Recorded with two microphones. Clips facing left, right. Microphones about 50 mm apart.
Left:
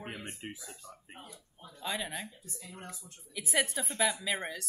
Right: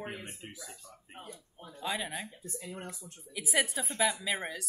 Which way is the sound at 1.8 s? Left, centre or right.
Centre.